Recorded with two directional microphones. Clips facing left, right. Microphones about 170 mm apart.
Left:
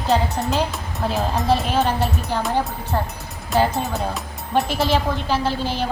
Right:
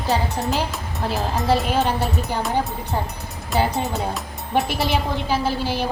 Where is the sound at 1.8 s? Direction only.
20° right (ahead or behind).